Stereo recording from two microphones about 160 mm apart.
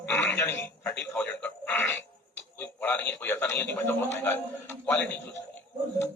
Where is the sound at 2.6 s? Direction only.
10° left (ahead or behind).